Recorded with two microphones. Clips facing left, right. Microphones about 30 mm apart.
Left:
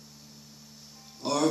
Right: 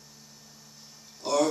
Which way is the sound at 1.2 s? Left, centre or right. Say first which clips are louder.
Right 3 dB; centre.